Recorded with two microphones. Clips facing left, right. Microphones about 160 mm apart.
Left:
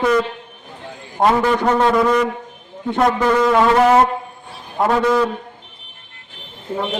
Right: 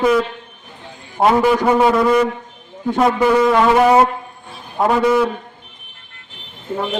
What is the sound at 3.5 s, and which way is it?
Music, 5° right (ahead or behind).